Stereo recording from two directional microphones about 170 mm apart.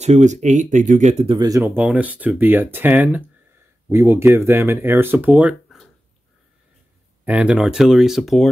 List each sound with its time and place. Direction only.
0.0 s speech: 45° right (ahead or behind)
1.4 s speech: 20° right (ahead or behind)
7.2 s speech: 5° right (ahead or behind)